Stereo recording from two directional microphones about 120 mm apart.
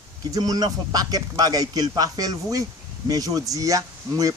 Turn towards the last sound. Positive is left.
turn(degrees=-30)  # may be behind; listen again after turning